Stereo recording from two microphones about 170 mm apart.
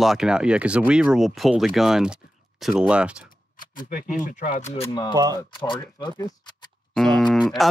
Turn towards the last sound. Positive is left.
turn(degrees=0)  # may be behind; listen again after turning